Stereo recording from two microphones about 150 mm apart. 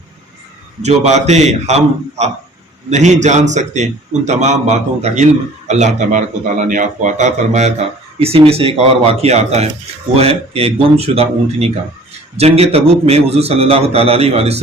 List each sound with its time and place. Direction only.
0.8 s a man's voice: 50° right (ahead or behind)